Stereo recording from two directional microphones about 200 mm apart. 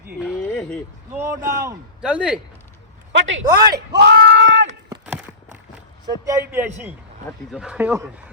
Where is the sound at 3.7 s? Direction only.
55° right (ahead or behind).